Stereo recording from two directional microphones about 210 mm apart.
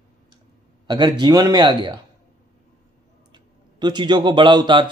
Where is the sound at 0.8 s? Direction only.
20° right (ahead or behind).